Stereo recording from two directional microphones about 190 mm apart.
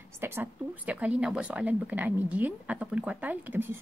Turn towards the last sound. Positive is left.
turn(degrees=-10)  # may be behind; listen again after turning